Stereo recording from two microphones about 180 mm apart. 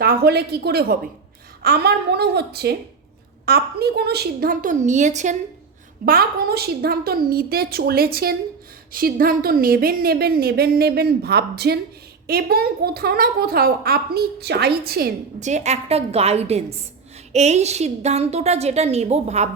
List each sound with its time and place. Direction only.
0.0 s a woman's voice: 60° right (ahead or behind); by 5.4 s 40° right (ahead or behind)
6.1 s speech: 55° right (ahead or behind)
15.4 s a woman's voice: 40° right (ahead or behind)